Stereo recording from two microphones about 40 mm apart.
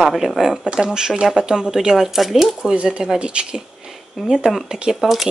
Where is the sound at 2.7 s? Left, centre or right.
Right.